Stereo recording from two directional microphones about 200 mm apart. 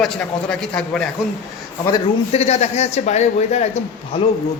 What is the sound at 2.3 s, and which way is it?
A man's voice, 30° left (ahead or behind).